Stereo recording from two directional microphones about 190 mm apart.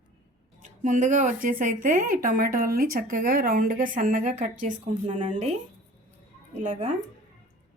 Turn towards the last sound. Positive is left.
turn(degrees=-40)  # may be behind; listen again after turning